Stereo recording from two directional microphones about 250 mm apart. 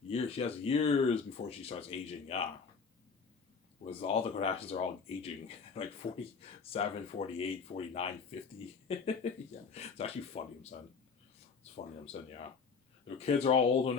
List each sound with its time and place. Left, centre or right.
0.1 s speech: left
4.0 s speech: left
8.9 s speech: left
13.1 s speech: left